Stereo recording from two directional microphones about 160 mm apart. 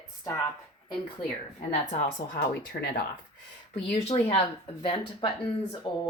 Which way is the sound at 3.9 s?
35° left (ahead or behind).